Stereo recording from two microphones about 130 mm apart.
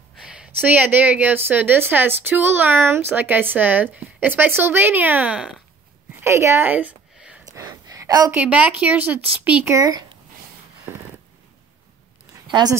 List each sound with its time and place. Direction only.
0.2 s a woman's voice: 10° right (ahead or behind)
6.1 s a sound: 20° right (ahead or behind)
7.4 s a sound: 25° right (ahead or behind)
8.4 s a woman's voice: 10° right (ahead or behind)
9.8 s speech: 30° right (ahead or behind)
12.4 s speech: 35° right (ahead or behind)